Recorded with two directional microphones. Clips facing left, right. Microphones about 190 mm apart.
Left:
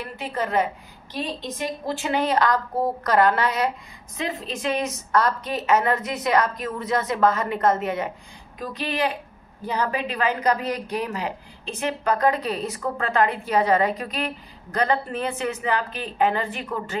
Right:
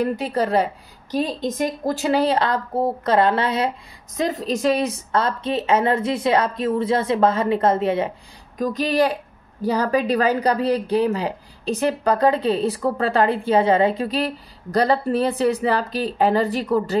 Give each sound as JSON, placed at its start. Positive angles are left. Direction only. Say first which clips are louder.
{"t": 0.0, "sound": "a woman's voice", "louder": "right 8 dB", "side_deg": -40}
{"t": 1.1, "sound": "a woman's voice", "louder": "right 7 dB", "side_deg": -45}
{"t": 4.2, "sound": "a woman's voice", "louder": "right 7 dB", "side_deg": -40}
{"t": 8.5, "sound": "a woman's voice", "louder": "right 8 dB", "side_deg": -40}